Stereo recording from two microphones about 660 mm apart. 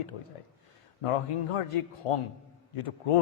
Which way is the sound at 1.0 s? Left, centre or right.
Left.